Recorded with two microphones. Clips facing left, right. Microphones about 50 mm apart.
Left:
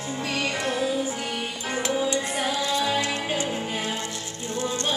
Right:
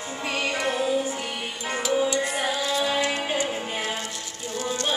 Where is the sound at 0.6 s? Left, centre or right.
Centre.